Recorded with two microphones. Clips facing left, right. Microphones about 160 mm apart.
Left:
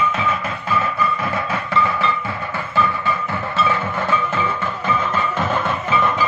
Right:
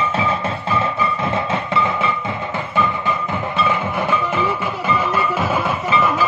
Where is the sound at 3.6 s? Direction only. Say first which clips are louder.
Right 1 dB; 15° right (ahead or behind).